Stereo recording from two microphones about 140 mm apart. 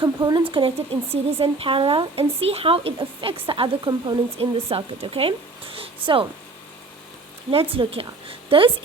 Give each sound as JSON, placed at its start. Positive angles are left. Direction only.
{"t": 0.3, "sound": "speech", "side_deg": -40}
{"t": 7.5, "sound": "a woman's voice", "side_deg": -40}